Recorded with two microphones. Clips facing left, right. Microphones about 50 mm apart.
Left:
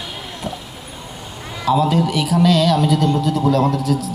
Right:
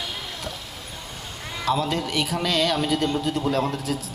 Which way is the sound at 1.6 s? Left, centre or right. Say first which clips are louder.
Left 8 dB; centre.